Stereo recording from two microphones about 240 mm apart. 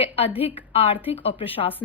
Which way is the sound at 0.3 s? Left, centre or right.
Left.